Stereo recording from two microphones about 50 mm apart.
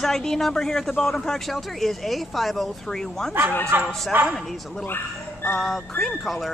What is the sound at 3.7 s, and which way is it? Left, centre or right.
Speech, right.